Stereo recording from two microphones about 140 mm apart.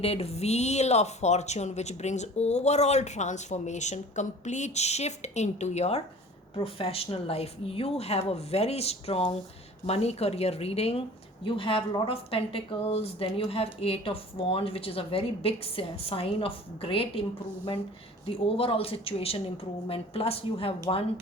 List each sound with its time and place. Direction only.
0.0 s a woman's voice: 45° left (ahead or behind)
18.4 s a woman's voice: 40° left (ahead or behind)